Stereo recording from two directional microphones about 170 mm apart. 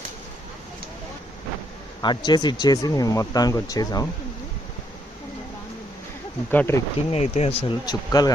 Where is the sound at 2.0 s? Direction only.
25° left (ahead or behind).